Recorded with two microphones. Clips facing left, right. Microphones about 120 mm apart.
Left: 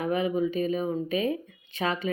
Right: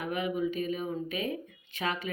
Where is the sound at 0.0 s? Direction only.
35° left (ahead or behind).